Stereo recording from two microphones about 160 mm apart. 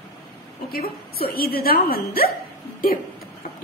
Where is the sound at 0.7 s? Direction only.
70° left (ahead or behind).